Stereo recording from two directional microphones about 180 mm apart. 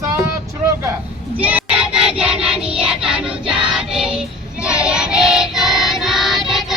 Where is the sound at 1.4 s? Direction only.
10° right (ahead or behind).